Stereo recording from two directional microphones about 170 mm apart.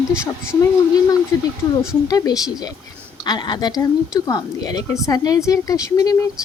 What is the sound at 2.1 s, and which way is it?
Speech, 20° left (ahead or behind).